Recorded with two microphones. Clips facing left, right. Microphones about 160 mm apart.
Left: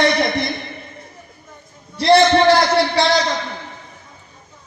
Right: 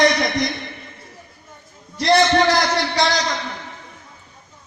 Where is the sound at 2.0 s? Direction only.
30° left (ahead or behind).